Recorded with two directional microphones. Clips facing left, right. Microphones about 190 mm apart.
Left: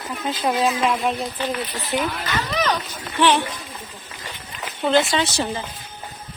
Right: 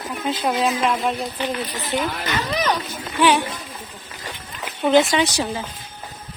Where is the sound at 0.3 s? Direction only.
Centre (ahead or behind).